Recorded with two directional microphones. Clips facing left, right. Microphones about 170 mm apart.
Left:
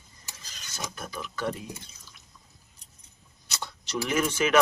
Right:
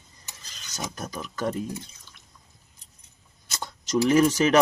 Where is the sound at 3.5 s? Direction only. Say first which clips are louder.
Right 6 dB; 45° right (ahead or behind).